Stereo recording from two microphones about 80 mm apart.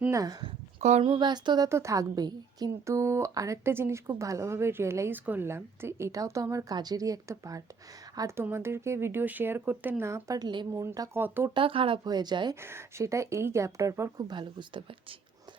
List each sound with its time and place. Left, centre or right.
0.1 s a woman's voice: right
1.0 s speech: right
1.7 s a woman's voice: right
2.2 s a woman's voice: right
2.8 s speech: right
6.1 s a woman's voice: right
8.4 s speech: right
10.0 s speech: right
11.1 s speech: right
11.5 s speech: right
12.5 s speech: right
14.2 s speech: right